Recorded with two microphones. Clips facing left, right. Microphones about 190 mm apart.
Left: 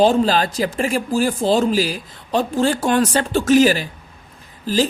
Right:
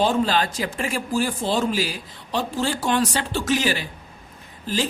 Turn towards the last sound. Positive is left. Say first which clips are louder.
# left 6 dB
turn(degrees=35)  # may be behind; listen again after turning